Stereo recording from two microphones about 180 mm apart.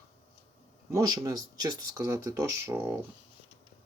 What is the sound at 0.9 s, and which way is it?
Speech, 20° right (ahead or behind).